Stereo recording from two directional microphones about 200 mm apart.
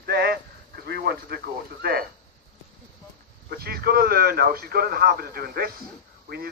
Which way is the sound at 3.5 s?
50° right (ahead or behind).